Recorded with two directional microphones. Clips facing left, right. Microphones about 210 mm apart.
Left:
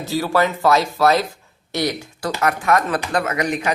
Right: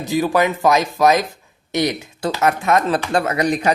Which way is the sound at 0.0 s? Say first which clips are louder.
Right 2 dB; 15° right (ahead or behind).